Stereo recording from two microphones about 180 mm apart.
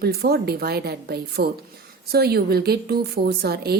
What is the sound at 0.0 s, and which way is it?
A woman's voice, 60° right (ahead or behind).